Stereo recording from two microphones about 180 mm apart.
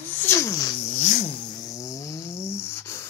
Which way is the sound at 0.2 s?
15° left (ahead or behind).